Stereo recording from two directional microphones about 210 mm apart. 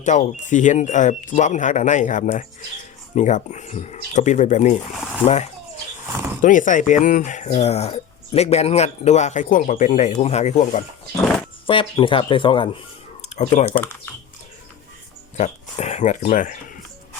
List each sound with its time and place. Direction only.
0.0 s speech: 35° left (ahead or behind)
15.4 s speech: 35° left (ahead or behind)